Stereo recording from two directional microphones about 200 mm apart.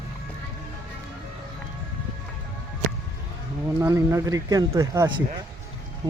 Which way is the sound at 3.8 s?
15° right (ahead or behind).